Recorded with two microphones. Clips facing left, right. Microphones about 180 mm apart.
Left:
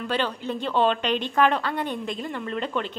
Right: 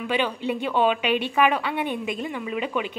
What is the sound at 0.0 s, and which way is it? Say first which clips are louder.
A woman's voice: right 2 dB; 10° right (ahead or behind).